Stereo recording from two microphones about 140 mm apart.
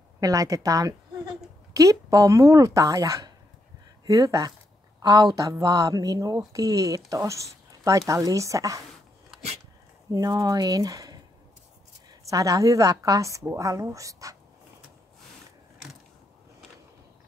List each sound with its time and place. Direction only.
0.2 s speech: 25° right (ahead or behind)
10.1 s speech: 25° right (ahead or behind)